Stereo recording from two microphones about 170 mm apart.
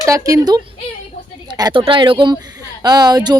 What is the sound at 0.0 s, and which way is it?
Speech, 20° right (ahead or behind).